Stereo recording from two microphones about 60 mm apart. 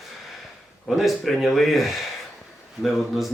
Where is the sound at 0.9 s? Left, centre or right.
Centre.